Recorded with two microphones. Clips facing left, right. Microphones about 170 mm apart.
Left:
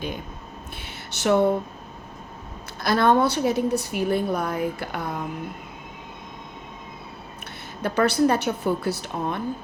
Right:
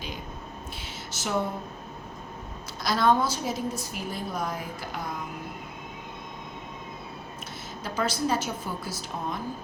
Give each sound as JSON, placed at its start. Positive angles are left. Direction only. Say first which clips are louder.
{"t": 1.1, "sound": "speech", "louder": "left 10 dB", "side_deg": 65}
{"t": 2.8, "sound": "a woman's voice", "louder": "left 4 dB", "side_deg": 60}
{"t": 7.8, "sound": "a woman's voice", "louder": "left 9 dB", "side_deg": 60}